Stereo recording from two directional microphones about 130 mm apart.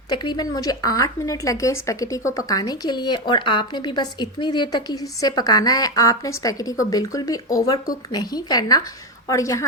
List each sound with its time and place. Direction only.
0.1 s a woman's voice: 35° left (ahead or behind)